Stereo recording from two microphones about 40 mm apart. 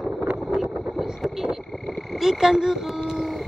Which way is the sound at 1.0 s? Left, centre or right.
Centre.